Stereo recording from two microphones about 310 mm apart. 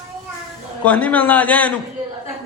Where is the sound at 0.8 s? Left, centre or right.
Centre.